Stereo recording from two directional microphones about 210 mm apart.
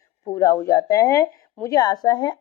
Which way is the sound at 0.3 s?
15° left (ahead or behind).